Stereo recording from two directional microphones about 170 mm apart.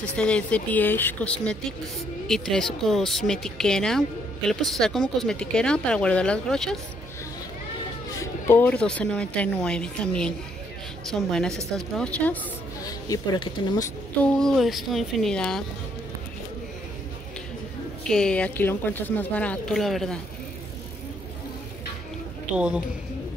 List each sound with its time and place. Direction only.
0.1 s speech: 5° left (ahead or behind)
8.2 s speech: 15° left (ahead or behind)
12.8 s speech: 20° left (ahead or behind)
14.2 s speech: centre (ahead or behind)
18.0 s speech: 5° left (ahead or behind)